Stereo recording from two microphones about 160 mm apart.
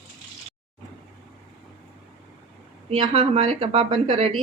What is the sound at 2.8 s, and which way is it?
A woman's voice, 35° right (ahead or behind).